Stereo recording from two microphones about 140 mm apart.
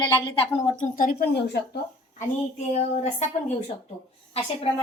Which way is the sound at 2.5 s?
55° left (ahead or behind).